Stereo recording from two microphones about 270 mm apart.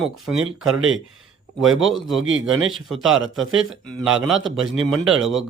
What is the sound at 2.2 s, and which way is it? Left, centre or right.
Speech, right.